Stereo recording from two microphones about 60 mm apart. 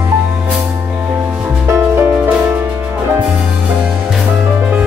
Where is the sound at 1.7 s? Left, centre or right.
Right.